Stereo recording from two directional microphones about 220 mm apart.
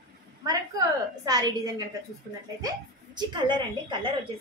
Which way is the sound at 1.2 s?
15° right (ahead or behind).